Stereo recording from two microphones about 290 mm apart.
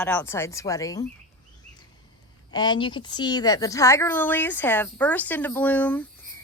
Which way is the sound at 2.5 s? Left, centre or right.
Centre.